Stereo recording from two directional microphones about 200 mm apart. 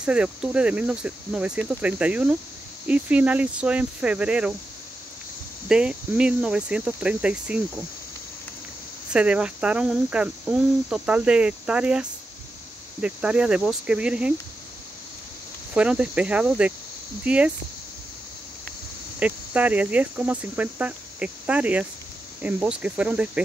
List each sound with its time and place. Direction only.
0.0 s speech: 5° right (ahead or behind)
5.7 s speech: 5° right (ahead or behind)
9.1 s speech: 5° right (ahead or behind)
15.7 s speech: 5° right (ahead or behind)
19.1 s speech: 5° right (ahead or behind)